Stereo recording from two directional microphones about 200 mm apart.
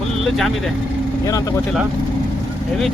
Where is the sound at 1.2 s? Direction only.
20° left (ahead or behind).